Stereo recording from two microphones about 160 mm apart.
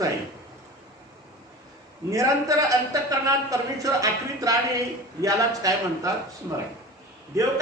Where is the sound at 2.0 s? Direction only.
20° right (ahead or behind).